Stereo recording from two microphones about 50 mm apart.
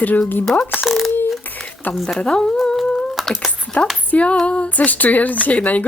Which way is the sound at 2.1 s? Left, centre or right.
Centre.